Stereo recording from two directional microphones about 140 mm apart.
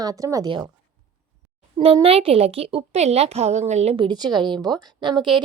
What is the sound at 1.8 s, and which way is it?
A woman's voice, 40° right (ahead or behind).